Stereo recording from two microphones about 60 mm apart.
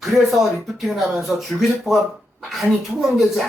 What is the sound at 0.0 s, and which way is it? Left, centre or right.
Speech, centre.